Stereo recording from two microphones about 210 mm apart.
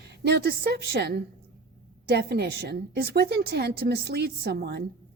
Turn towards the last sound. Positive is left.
turn(degrees=-50)  # may be behind; listen again after turning